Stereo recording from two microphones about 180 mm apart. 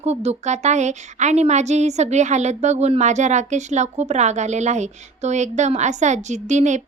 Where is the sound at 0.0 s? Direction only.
35° right (ahead or behind).